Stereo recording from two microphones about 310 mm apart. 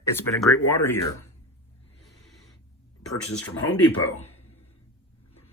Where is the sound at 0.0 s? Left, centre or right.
Centre.